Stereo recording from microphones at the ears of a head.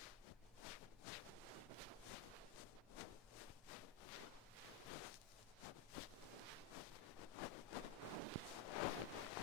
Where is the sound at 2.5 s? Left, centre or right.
Left.